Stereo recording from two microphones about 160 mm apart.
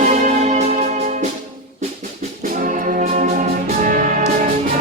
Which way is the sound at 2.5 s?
55° right (ahead or behind).